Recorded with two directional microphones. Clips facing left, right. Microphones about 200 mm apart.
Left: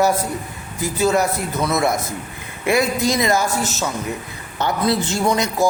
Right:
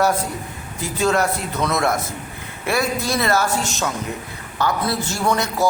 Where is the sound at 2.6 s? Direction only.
20° left (ahead or behind).